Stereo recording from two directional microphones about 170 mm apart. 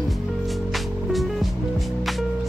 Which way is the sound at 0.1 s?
Centre (ahead or behind).